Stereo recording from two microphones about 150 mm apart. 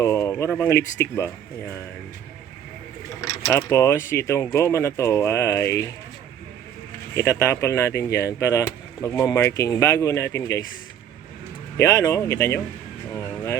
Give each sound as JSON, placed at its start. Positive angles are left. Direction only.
{"t": 0.0, "sound": "speech", "side_deg": 15}
{"t": 3.2, "sound": "speech", "side_deg": 20}
{"t": 7.2, "sound": "speech", "side_deg": 15}
{"t": 11.8, "sound": "speech", "side_deg": 25}
{"t": 13.1, "sound": "a sound", "side_deg": 20}